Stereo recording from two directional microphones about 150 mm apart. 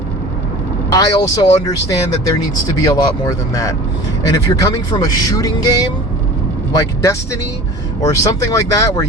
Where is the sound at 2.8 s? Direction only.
25° left (ahead or behind).